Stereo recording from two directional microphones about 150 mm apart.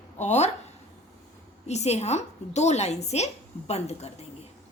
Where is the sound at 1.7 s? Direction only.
45° left (ahead or behind).